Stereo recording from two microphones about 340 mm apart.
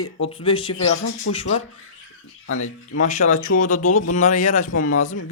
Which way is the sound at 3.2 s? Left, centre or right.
Left.